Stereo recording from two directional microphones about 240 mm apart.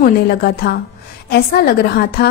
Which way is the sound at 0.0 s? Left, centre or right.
Left.